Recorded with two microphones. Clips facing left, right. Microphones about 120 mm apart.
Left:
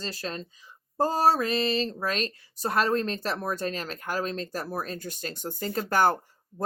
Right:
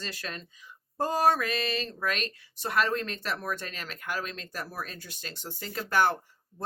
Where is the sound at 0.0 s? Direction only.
35° left (ahead or behind).